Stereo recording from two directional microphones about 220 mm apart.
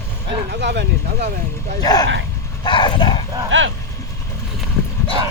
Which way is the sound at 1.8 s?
15° left (ahead or behind).